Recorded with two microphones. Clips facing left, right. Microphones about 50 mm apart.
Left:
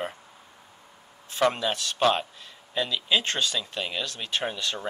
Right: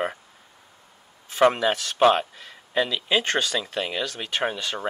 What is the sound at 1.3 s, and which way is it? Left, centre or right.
Speech, right.